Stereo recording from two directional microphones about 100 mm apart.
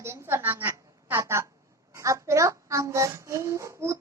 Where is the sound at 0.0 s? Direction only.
25° right (ahead or behind).